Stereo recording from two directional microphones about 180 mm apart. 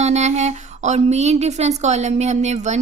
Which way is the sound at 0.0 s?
40° right (ahead or behind).